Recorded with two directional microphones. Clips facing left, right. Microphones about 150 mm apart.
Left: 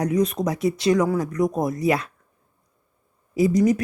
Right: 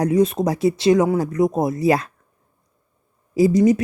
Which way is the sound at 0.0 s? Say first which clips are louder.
Right 4 dB; 30° right (ahead or behind).